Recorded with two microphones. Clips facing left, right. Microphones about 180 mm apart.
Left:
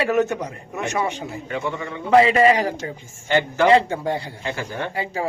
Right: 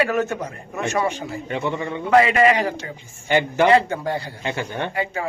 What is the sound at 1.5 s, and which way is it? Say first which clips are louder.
Speech: right 2 dB; 25° right (ahead or behind).